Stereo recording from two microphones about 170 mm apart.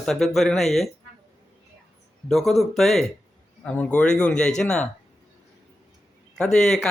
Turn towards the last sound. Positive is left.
turn(degrees=0)  # may be behind; listen again after turning